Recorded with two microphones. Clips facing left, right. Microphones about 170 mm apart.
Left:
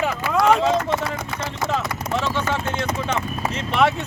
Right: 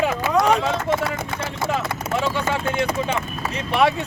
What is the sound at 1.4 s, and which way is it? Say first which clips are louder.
Speech: even; 10° right (ahead or behind).